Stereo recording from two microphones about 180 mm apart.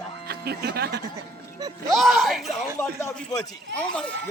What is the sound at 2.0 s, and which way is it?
Speech, centre (ahead or behind).